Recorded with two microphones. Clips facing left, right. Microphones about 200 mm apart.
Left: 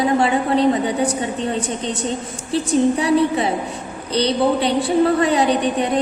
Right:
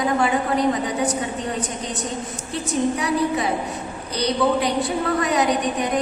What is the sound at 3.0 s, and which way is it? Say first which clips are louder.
A woman's voice: left 5 dB; 30° left (ahead or behind).